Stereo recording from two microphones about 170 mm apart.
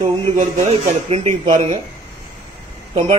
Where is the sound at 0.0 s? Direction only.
45° right (ahead or behind).